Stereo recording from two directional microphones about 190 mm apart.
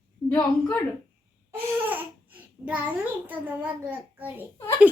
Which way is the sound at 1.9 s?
10° right (ahead or behind).